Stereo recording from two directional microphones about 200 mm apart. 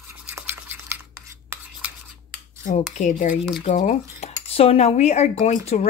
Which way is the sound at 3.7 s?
35° left (ahead or behind).